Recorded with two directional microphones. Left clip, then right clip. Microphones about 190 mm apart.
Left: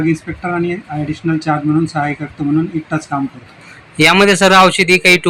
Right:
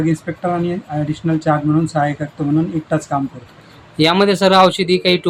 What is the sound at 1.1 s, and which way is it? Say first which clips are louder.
Speech: even; 25° right (ahead or behind).